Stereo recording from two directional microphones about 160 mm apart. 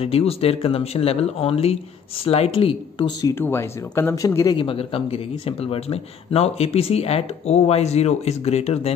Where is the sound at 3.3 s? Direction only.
15° left (ahead or behind); by 8.9 s 40° left (ahead or behind).